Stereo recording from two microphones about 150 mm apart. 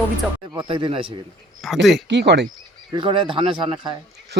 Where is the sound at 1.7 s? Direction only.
Centre (ahead or behind).